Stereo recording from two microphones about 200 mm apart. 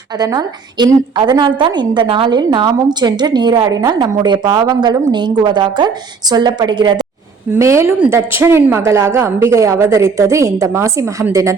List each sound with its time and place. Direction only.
0.2 s a woman's voice: 20° right (ahead or behind)